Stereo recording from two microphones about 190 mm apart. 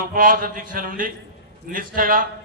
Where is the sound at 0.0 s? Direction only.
45° right (ahead or behind).